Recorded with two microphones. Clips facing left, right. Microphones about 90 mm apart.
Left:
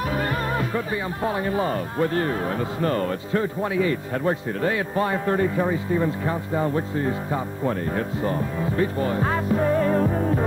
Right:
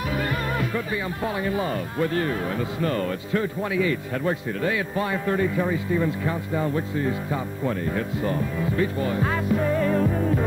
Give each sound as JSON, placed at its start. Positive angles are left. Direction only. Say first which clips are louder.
{"t": 0.1, "sound": "speech", "louder": "left 2 dB", "side_deg": 35}